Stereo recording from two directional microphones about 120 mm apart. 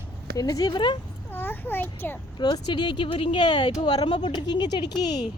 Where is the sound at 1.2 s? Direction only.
15° left (ahead or behind).